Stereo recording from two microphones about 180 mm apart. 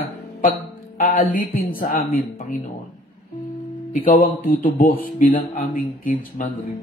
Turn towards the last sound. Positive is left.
turn(degrees=50)  # may be behind; listen again after turning